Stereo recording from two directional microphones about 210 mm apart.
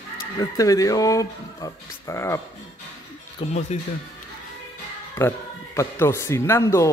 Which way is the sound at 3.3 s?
35° left (ahead or behind).